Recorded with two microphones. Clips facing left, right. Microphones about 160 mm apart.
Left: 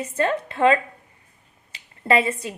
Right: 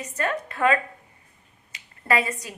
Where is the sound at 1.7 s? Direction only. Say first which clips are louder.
Left 4 dB; 25° left (ahead or behind).